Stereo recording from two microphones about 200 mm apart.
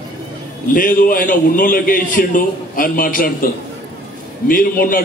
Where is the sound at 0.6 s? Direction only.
45° left (ahead or behind).